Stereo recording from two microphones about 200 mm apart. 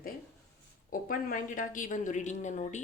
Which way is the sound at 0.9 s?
45° left (ahead or behind).